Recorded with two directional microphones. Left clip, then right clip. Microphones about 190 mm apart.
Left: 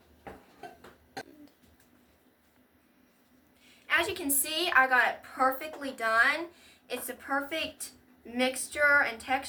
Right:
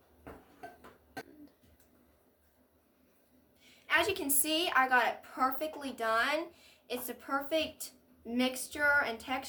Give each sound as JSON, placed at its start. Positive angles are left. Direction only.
{"t": 3.8, "sound": "a woman's voice", "side_deg": -50}